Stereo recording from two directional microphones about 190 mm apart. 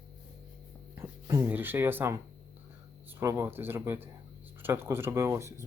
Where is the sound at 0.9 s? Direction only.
15° right (ahead or behind).